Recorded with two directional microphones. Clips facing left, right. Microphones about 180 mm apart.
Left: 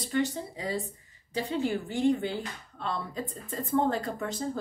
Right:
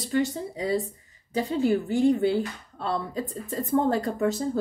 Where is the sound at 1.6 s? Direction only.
40° right (ahead or behind).